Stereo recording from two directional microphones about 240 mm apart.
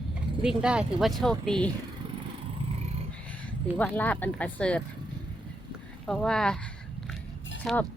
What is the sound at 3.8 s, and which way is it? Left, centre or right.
Speech, centre.